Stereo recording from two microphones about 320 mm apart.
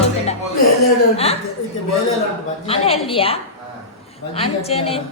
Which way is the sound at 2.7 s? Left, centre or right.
Centre.